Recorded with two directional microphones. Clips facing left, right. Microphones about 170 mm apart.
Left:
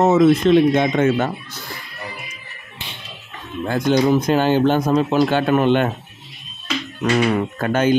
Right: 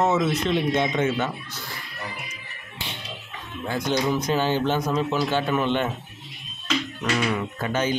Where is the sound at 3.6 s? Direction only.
50° left (ahead or behind).